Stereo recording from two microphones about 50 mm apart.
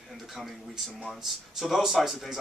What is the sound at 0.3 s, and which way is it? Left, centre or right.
Speech, centre.